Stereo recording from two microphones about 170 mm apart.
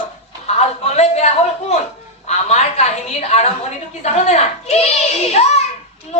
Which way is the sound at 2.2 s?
40° left (ahead or behind).